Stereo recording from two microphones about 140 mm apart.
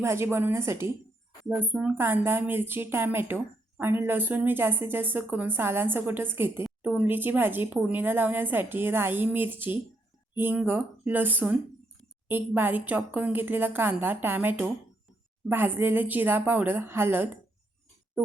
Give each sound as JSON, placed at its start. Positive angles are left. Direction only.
{"t": 0.0, "sound": "a woman's voice", "side_deg": -20}